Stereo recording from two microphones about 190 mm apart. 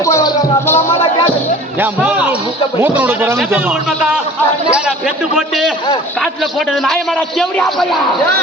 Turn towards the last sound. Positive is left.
turn(degrees=0)  # may be behind; listen again after turning